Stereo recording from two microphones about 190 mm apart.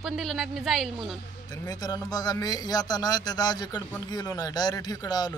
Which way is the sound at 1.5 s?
20° left (ahead or behind).